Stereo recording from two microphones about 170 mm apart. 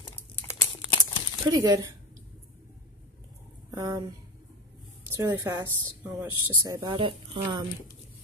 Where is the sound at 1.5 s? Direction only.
20° right (ahead or behind).